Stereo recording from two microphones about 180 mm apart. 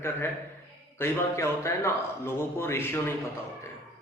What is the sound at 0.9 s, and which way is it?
A man's voice, 15° left (ahead or behind).